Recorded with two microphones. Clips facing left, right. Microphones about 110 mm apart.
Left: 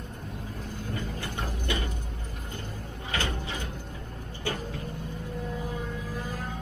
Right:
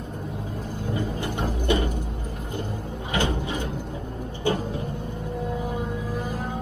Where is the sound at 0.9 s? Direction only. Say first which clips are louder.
Right 7 dB; 20° right (ahead or behind).